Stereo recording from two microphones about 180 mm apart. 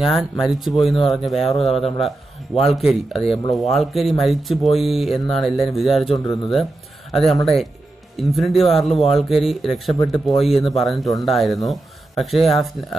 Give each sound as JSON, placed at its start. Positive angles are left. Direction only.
{"t": 0.0, "sound": "speech", "side_deg": 0}
{"t": 6.1, "sound": "speech", "side_deg": 20}
{"t": 6.5, "sound": "a sound", "side_deg": 0}
{"t": 8.2, "sound": "speech", "side_deg": 0}